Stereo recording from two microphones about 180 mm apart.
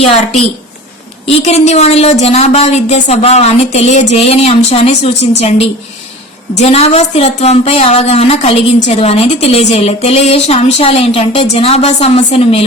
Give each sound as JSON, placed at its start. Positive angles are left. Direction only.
{"t": 0.0, "sound": "speech", "side_deg": 35}